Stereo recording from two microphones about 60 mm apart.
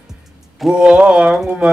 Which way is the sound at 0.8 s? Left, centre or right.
Centre.